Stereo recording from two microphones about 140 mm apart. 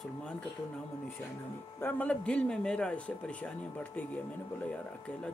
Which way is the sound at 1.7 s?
15° left (ahead or behind).